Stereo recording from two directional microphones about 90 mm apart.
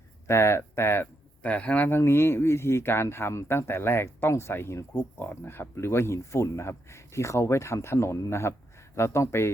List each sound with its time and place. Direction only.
0.3 s speech: 30° left (ahead or behind)